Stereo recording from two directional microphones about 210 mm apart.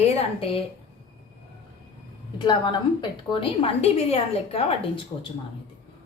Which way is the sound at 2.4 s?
20° left (ahead or behind).